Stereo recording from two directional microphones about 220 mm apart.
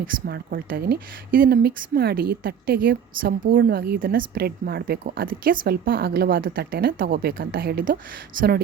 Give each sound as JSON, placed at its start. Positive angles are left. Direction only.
{"t": 0.0, "sound": "speech", "side_deg": -45}